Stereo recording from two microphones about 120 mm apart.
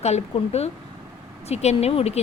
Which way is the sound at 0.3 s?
60° left (ahead or behind).